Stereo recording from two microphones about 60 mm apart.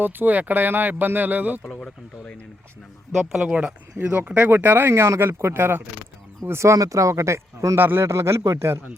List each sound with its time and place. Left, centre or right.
0.0 s speech: right
1.6 s speech: centre
3.4 s speech: right
6.4 s speech: right
6.7 s speech: right
7.8 s speech: right
8.0 s speech: right